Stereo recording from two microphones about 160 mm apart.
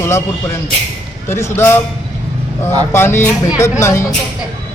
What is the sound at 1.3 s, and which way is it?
Speech, 15° left (ahead or behind).